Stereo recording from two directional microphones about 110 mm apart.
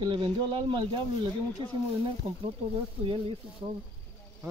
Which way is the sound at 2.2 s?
60° right (ahead or behind).